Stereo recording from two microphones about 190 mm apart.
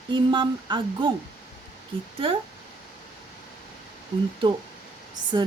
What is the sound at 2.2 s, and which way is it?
Speech, 30° right (ahead or behind).